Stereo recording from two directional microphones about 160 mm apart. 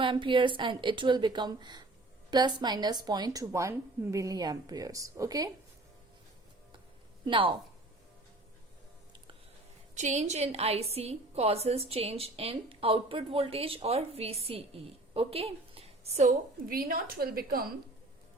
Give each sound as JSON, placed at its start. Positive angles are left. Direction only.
{"t": 0.0, "sound": "a woman's voice", "side_deg": -30}
{"t": 7.3, "sound": "a woman's voice", "side_deg": -30}
{"t": 9.9, "sound": "a woman's voice", "side_deg": -50}
{"t": 16.6, "sound": "a woman's voice", "side_deg": -65}